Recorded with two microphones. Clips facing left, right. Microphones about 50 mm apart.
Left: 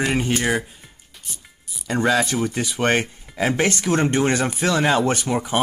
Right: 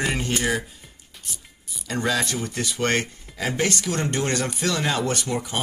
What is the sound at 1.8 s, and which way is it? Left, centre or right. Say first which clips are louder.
Speech: left 5 dB; centre.